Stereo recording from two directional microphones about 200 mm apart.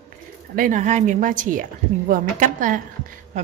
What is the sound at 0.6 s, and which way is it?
A woman's voice, 40° right (ahead or behind).